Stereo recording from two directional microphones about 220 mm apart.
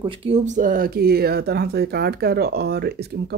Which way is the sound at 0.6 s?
40° right (ahead or behind).